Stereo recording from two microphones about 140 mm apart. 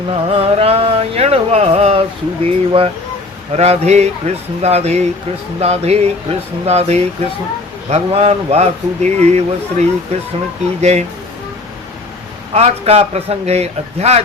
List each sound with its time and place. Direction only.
0.3 s a man's voice: 45° right (ahead or behind)
12.5 s a man's voice: 50° right (ahead or behind)